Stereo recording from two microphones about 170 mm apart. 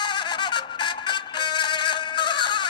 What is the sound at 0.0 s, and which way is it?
Music, 25° left (ahead or behind).